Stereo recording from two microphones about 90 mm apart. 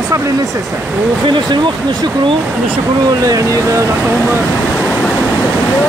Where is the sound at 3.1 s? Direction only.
40° right (ahead or behind).